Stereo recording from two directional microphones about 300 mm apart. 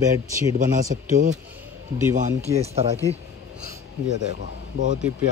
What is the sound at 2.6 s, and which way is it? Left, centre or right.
Speech, right.